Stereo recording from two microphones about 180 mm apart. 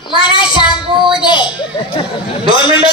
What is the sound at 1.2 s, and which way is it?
Children playing, 25° left (ahead or behind).